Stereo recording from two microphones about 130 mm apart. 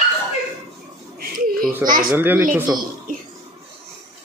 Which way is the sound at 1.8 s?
90° right.